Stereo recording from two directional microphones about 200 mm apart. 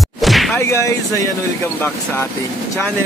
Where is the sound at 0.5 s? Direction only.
15° left (ahead or behind).